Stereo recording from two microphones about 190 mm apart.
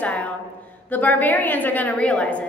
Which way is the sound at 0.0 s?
10° left (ahead or behind).